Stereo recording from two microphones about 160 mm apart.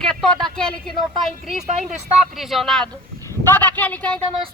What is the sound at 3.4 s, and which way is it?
Speech, 10° left (ahead or behind).